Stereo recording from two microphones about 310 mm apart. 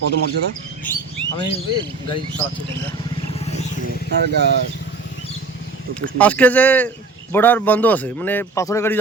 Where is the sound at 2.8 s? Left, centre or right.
Centre.